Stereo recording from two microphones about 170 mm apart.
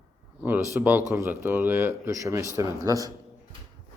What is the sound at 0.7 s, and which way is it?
Speech, 10° right (ahead or behind).